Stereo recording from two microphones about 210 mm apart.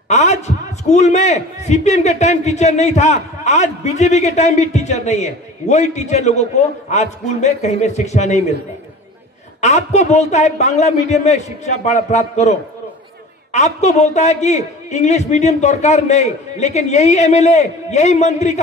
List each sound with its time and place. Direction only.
0.1 s a man's voice: 30° left (ahead or behind)
9.6 s a man's voice: 35° left (ahead or behind)